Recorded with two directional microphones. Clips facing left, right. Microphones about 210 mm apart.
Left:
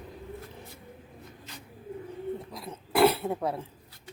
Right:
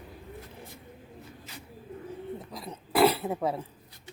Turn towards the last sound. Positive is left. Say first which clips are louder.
# even
turn(degrees=0)  # may be behind; listen again after turning